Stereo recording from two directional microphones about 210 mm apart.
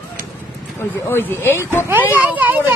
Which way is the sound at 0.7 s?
10° left (ahead or behind).